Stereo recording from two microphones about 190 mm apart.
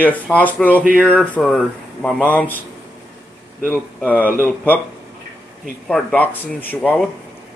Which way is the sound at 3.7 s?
10° left (ahead or behind).